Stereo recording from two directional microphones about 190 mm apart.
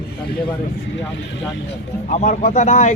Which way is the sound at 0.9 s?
70° left (ahead or behind).